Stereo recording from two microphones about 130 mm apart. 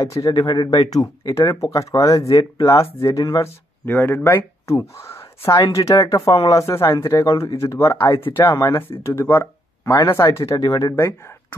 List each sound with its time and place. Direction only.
0.0 s speech: 25° left (ahead or behind)
3.8 s speech: 15° left (ahead or behind)
8.2 s speech: 35° left (ahead or behind)